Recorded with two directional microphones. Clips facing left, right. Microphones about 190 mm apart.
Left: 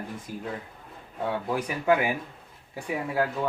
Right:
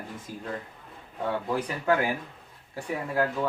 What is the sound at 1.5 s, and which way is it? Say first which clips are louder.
Speech: left 3 dB; 15° left (ahead or behind).